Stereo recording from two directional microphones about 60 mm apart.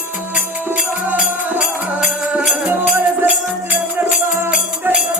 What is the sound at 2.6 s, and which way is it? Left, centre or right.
Music, right.